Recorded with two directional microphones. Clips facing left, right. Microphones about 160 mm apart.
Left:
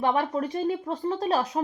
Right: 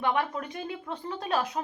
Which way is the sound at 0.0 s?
35° left (ahead or behind).